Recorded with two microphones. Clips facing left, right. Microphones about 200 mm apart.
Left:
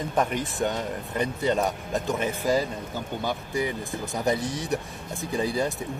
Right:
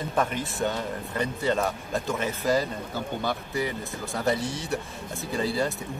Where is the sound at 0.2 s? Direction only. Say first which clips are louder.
Left 1 dB; 15° left (ahead or behind).